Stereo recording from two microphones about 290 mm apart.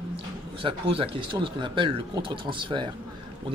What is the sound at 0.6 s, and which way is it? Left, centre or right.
A man's voice, centre.